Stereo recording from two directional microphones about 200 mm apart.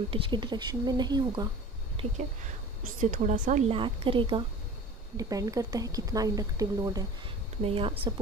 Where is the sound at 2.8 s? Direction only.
40° right (ahead or behind); by 7.0 s 15° right (ahead or behind).